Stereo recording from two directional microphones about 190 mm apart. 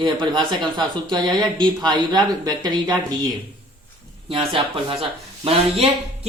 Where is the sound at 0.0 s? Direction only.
25° right (ahead or behind).